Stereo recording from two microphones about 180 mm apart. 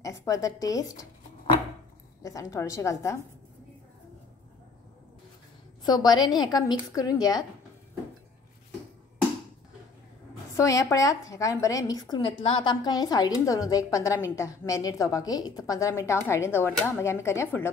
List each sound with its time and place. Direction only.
0.2 s a woman's voice: 20° left (ahead or behind)
2.2 s a woman's voice: 20° left (ahead or behind)
5.9 s a woman's voice: 25° left (ahead or behind)
10.5 s a woman's voice: 15° left (ahead or behind)
12.1 s a woman's voice: 30° left (ahead or behind); by 17.6 s 15° left (ahead or behind)